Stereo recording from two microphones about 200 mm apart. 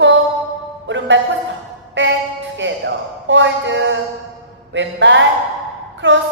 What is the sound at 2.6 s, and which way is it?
Speech, 65° right (ahead or behind).